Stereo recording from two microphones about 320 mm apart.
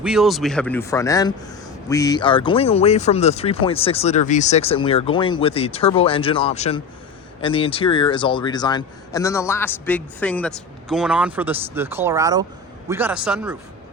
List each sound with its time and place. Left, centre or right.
0.0 s a man's voice: centre